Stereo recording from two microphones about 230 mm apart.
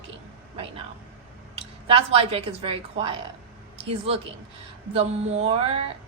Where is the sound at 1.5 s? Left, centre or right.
Right.